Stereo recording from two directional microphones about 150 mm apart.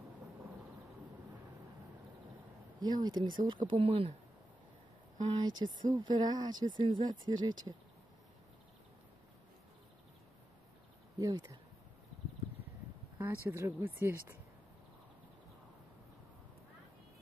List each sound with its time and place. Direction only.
2.8 s speech: 25° right (ahead or behind)
5.2 s speech: 30° right (ahead or behind)
11.1 s speech: 25° right (ahead or behind)
13.5 s speech: 15° right (ahead or behind)